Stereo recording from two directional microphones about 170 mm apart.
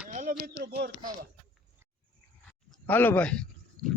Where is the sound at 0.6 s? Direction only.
75° right (ahead or behind).